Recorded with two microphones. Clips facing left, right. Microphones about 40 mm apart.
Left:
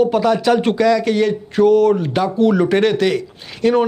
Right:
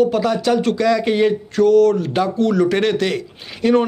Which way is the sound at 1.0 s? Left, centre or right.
Centre.